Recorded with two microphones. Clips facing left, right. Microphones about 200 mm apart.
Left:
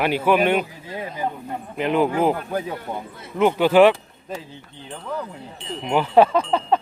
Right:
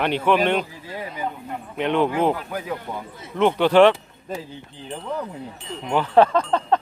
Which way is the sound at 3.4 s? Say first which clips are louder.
Even; 5° left (ahead or behind).